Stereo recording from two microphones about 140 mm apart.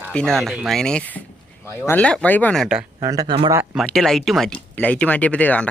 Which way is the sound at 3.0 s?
25° right (ahead or behind).